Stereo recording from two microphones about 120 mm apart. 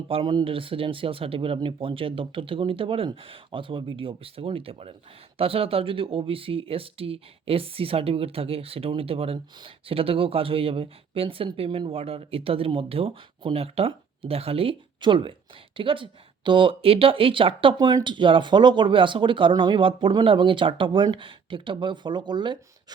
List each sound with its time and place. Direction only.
0.1 s speech: 40° right (ahead or behind)